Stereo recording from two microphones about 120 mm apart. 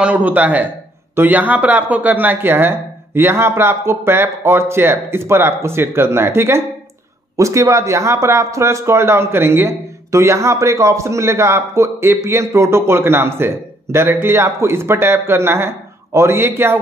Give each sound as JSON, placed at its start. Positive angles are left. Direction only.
{"t": 0.0, "sound": "a man's voice", "side_deg": -15}